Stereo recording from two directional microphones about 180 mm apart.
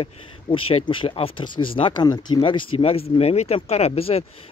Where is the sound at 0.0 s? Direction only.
30° left (ahead or behind).